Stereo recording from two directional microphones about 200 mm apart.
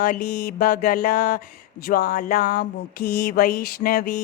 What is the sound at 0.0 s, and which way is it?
Speech, 50° left (ahead or behind).